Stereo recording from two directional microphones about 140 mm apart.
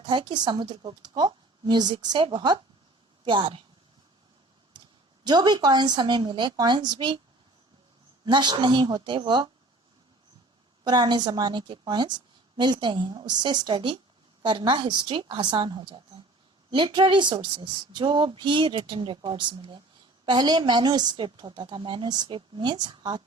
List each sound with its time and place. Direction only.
0.0 s speech: 35° right (ahead or behind)
5.2 s speech: 30° right (ahead or behind)
8.2 s speech: 35° right (ahead or behind)
10.8 s speech: 30° right (ahead or behind)